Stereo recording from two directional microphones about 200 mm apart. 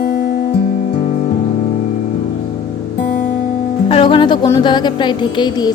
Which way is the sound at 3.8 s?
25° left (ahead or behind).